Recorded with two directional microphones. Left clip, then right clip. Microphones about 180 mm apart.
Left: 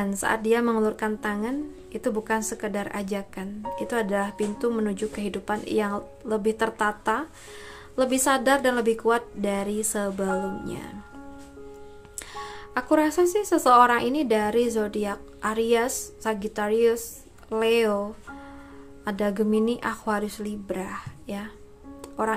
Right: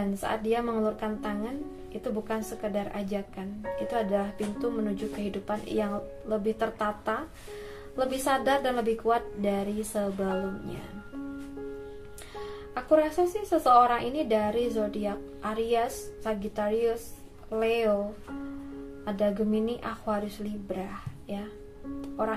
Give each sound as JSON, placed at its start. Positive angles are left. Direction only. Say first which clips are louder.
{"t": 0.2, "sound": "speech", "louder": "left 6 dB", "side_deg": 30}
{"t": 12.4, "sound": "speech", "louder": "left 5 dB", "side_deg": 35}
{"t": 19.0, "sound": "speech", "louder": "left 2 dB", "side_deg": 35}